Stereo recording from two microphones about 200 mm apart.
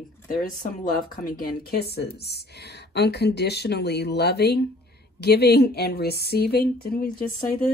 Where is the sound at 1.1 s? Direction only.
45° left (ahead or behind).